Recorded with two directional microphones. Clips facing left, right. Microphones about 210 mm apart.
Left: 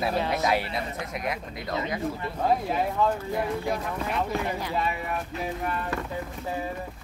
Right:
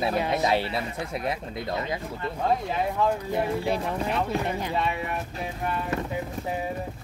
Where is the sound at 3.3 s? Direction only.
30° right (ahead or behind).